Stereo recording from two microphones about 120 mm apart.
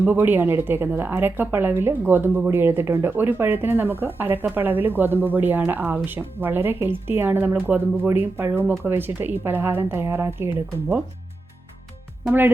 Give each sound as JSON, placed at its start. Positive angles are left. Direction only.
{"t": 0.0, "sound": "a woman's voice", "side_deg": -15}